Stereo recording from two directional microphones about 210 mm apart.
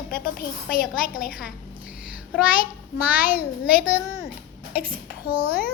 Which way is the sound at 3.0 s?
10° right (ahead or behind).